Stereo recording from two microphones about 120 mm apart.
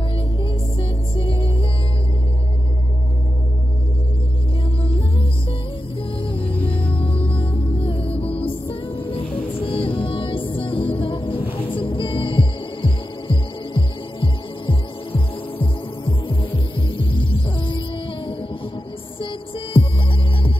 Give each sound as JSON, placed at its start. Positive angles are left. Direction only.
{"t": 0.4, "sound": "music", "side_deg": 45}
{"t": 6.1, "sound": "music", "side_deg": 50}